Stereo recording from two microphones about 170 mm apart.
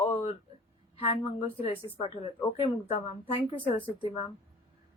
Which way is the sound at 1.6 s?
35° left (ahead or behind).